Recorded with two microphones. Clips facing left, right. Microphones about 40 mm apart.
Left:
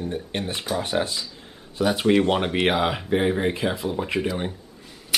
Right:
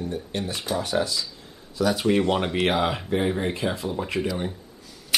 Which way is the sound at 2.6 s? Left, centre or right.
Centre.